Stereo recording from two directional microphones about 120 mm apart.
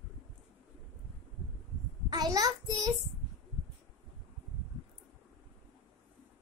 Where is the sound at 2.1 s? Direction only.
30° right (ahead or behind).